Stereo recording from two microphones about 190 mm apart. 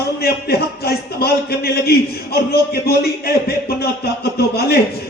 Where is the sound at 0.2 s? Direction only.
55° left (ahead or behind).